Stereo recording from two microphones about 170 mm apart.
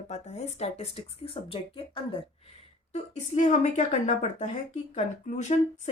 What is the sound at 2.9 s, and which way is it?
Speech, 45° left (ahead or behind).